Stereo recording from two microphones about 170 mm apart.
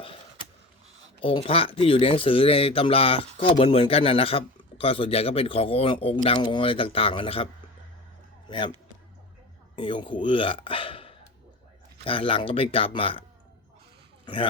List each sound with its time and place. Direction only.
1.2 s a man's voice: 30° left (ahead or behind)
8.4 s speech: 30° left (ahead or behind)
9.7 s a man's voice: 30° left (ahead or behind)